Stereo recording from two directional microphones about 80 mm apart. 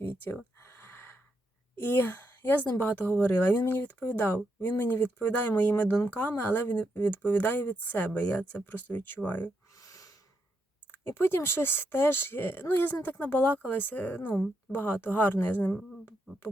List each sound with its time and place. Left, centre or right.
0.0 s a sound: left
1.7 s a woman's voice: left
9.7 s snort: left
11.0 s speech: left